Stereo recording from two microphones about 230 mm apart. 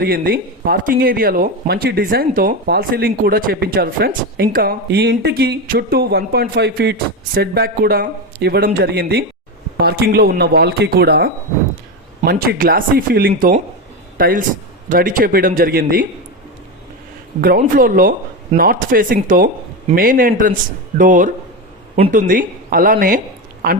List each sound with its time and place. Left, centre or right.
0.0 s a man's voice: right
17.4 s speech: right